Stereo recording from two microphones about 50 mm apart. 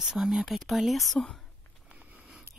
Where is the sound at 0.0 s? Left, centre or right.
Centre.